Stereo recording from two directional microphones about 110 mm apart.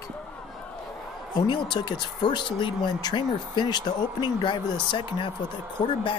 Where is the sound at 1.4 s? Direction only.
40° left (ahead or behind).